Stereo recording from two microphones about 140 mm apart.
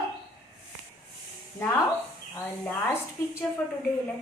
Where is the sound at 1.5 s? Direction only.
15° left (ahead or behind).